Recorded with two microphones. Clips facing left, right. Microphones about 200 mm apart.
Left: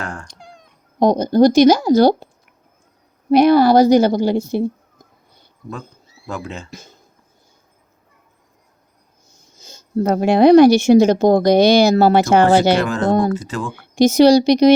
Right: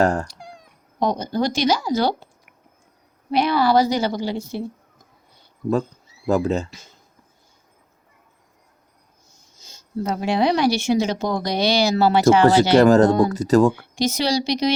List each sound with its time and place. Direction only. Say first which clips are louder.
0.0 s speech: right 11 dB; 40° right (ahead or behind)
0.3 s cat: right 1 dB; 10° right (ahead or behind)
0.9 s speech: left 9 dB; 40° left (ahead or behind)
3.2 s a woman's voice: left 8 dB; 45° left (ahead or behind)
6.2 s speech: right 9 dB; 40° right (ahead or behind)
9.6 s a woman's voice: left 7 dB; 50° left (ahead or behind)
12.7 s speech: right 4 dB; 40° right (ahead or behind)
13.8 s a woman's voice: left 11 dB; 45° left (ahead or behind)